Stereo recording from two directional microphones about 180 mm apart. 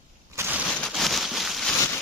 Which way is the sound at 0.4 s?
15° right (ahead or behind).